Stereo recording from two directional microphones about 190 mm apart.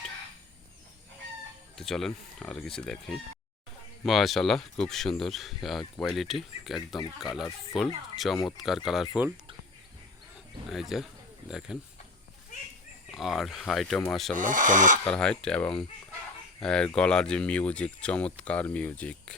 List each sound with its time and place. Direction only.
1.7 s speech: centre (ahead or behind)
4.0 s speech: centre (ahead or behind)
10.7 s speech: centre (ahead or behind)
13.1 s speech: centre (ahead or behind)
14.3 s speech: 45° right (ahead or behind)
15.0 s speech: 5° left (ahead or behind)